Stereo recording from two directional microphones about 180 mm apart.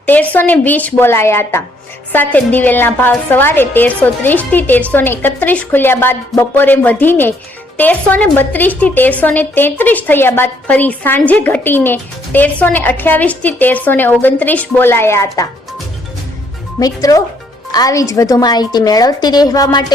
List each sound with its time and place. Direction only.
0.0 s a woman's voice: 10° left (ahead or behind)
16.8 s a woman's voice: 20° left (ahead or behind)